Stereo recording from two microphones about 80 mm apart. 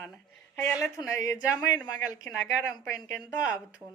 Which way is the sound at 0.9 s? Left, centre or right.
Left.